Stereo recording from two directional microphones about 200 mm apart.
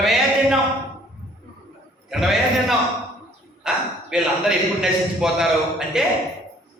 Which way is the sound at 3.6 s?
5° right (ahead or behind).